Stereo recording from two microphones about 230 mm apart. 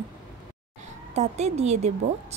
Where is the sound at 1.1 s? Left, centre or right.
Right.